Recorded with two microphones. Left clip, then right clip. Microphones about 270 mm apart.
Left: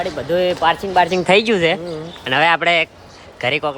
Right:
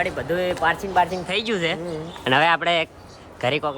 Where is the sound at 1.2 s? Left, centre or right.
Centre.